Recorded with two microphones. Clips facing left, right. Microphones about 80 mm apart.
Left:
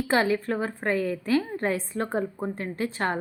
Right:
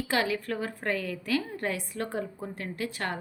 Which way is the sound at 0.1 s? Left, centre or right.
Left.